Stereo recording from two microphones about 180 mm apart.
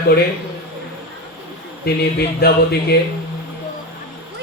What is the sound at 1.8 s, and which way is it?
Speech, 60° left (ahead or behind).